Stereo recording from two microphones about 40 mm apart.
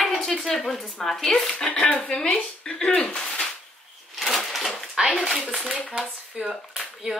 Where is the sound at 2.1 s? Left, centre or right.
Centre.